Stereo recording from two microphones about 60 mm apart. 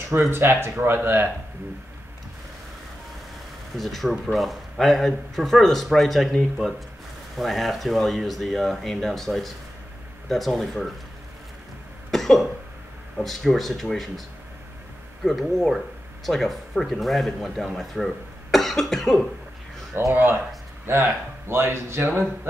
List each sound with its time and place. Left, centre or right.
0.1 s speech: right
3.7 s speech: centre
12.1 s cough: centre
13.2 s speech: centre
15.2 s speech: centre
20.1 s speech: right